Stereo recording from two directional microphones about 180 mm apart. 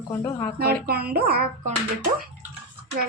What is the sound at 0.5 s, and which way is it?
Speech, 60° right (ahead or behind).